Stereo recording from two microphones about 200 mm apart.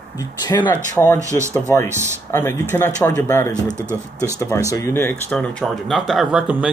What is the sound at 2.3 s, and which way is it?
Speech, 10° left (ahead or behind).